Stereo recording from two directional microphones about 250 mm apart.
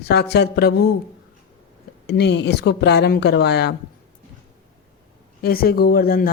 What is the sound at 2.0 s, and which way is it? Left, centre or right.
Speech, left.